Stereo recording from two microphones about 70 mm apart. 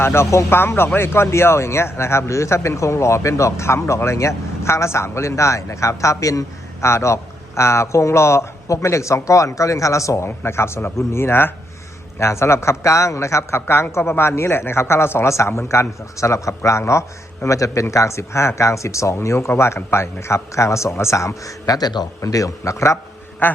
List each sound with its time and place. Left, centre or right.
0.0 s speech: left
6.8 s speech: left
10.2 s speech: left
22.2 s speech: left
23.4 s duck: left